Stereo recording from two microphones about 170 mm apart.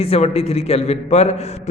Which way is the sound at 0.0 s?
35° left (ahead or behind).